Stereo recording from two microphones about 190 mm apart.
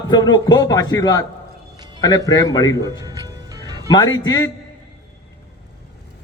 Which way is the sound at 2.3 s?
20° left (ahead or behind).